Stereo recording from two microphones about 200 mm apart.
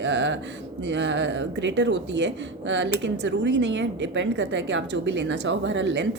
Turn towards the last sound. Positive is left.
turn(degrees=-65)  # may be behind; listen again after turning